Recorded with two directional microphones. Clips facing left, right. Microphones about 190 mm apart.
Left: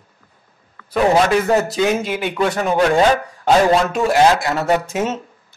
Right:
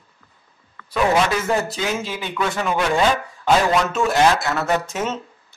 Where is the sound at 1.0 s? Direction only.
40° left (ahead or behind).